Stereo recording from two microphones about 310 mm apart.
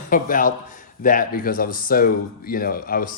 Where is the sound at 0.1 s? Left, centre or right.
Left.